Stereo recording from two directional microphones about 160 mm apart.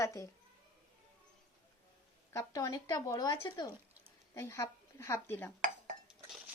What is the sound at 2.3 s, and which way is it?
A woman's voice, 20° left (ahead or behind).